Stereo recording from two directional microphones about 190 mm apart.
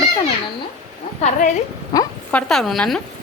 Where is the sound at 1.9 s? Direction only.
20° left (ahead or behind).